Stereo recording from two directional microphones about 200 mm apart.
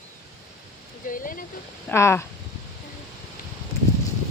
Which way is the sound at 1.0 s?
45° left (ahead or behind).